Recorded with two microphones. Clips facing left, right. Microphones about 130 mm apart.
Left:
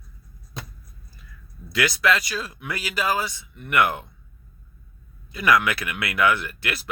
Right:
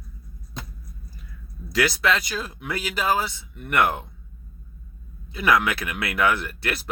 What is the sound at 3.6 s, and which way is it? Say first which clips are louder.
Speech: even; 40° right (ahead or behind).